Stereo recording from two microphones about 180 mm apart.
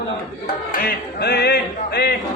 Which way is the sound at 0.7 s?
60° left (ahead or behind).